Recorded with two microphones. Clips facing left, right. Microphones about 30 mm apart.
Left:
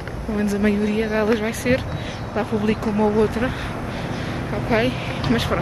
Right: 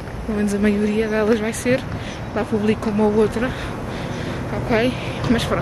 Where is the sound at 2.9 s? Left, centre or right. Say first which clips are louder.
Right 1 dB; right.